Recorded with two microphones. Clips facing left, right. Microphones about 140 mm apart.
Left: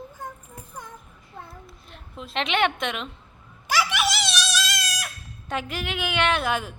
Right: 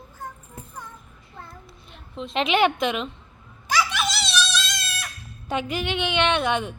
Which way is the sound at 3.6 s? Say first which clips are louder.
Even; 10° left (ahead or behind).